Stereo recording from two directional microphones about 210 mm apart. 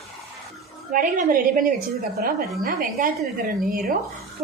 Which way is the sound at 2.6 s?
40° right (ahead or behind).